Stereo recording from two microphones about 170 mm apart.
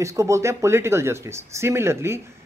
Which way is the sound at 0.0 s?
15° right (ahead or behind).